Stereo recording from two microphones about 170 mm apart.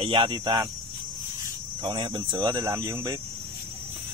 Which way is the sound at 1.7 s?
30° right (ahead or behind).